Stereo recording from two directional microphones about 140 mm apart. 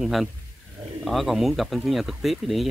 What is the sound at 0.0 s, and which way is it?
Speech, centre (ahead or behind).